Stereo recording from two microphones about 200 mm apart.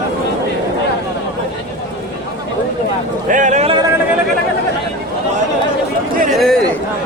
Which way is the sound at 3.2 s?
40° right (ahead or behind).